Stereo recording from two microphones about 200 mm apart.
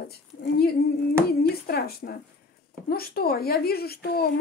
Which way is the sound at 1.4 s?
50° left (ahead or behind).